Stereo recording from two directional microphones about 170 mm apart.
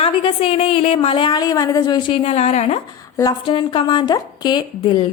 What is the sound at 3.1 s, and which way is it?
A woman's voice, 25° left (ahead or behind).